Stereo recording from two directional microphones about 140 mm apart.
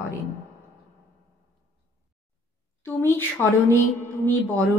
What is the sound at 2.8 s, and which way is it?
A woman's voice, 15° left (ahead or behind).